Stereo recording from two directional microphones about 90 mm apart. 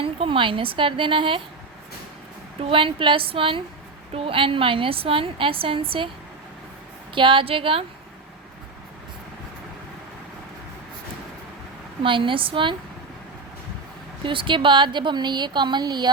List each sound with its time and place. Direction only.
0.0 s speech: 80° right
2.6 s speech: 85° right
4.1 s a woman's voice: 90° right
7.1 s speech: 65° right (ahead or behind)
12.0 s speech: 70° right (ahead or behind)
14.3 s speech: 65° right (ahead or behind)